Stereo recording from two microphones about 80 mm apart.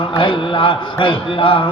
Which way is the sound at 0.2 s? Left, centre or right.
Left.